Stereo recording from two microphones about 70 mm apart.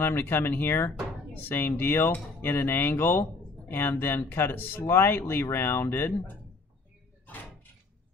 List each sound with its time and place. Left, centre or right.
0.0 s speech: left